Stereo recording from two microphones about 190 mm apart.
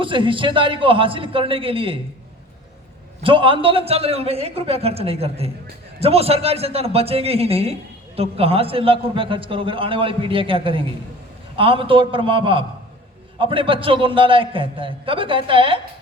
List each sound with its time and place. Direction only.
0.0 s a man's voice: 25° right (ahead or behind)
3.2 s a man's voice: 25° right (ahead or behind)